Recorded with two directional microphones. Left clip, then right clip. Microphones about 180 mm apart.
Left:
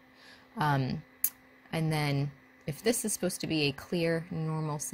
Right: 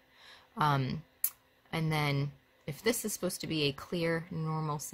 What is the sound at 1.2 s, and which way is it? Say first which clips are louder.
Tick: left 3 dB; centre (ahead or behind).